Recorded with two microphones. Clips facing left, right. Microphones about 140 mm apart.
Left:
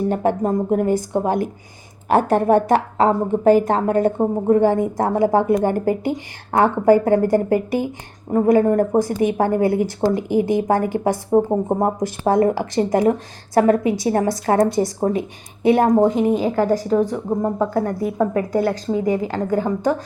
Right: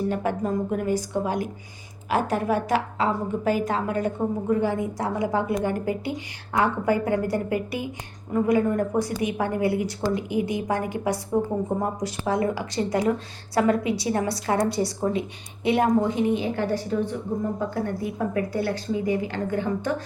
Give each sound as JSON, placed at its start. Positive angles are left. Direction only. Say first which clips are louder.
{"t": 0.1, "sound": "a woman's voice", "louder": "left 6 dB", "side_deg": 45}
{"t": 16.9, "sound": "speech", "louder": "left 7 dB", "side_deg": 90}
{"t": 17.7, "sound": "a woman's voice", "louder": "left 7 dB", "side_deg": 40}